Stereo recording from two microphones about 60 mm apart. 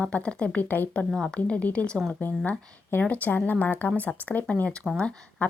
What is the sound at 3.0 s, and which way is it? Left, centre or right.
A woman's voice, left.